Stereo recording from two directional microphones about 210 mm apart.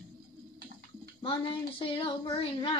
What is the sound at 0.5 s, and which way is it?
Pigeon, 45° right (ahead or behind).